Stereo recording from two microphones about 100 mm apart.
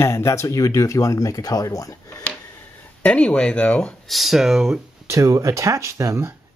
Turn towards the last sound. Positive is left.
turn(degrees=-30)  # may be behind; listen again after turning